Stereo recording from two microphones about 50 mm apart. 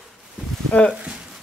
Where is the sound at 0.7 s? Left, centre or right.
Left.